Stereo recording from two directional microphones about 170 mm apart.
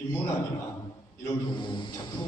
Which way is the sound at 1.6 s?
30° left (ahead or behind).